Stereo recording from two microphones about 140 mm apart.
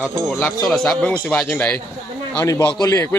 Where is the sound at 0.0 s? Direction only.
20° right (ahead or behind).